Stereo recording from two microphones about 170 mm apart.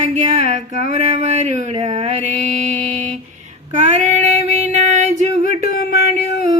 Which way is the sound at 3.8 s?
40° right (ahead or behind).